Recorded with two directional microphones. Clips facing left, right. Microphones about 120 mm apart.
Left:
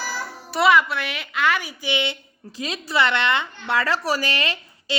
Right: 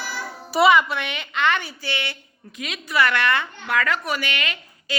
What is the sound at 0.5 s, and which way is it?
A woman's voice, centre (ahead or behind).